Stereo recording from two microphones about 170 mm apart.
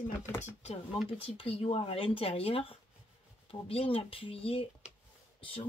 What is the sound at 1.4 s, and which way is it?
Speech, 35° left (ahead or behind).